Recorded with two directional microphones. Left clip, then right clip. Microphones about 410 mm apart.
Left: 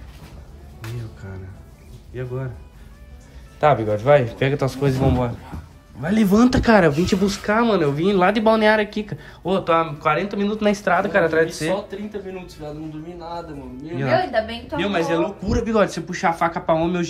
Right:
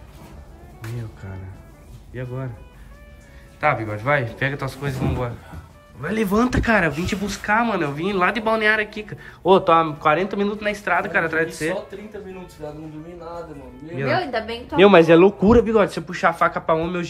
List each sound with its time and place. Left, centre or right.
0.9 s speech: centre
3.5 s speech: centre
14.1 s a woman's voice: centre